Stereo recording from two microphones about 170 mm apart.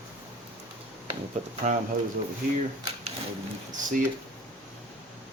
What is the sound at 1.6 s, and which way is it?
Speech, 45° right (ahead or behind).